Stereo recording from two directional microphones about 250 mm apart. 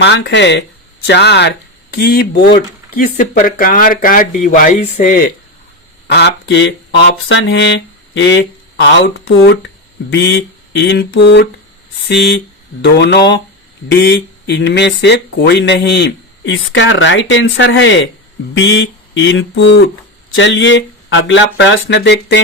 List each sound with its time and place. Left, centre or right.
0.0 s speech: left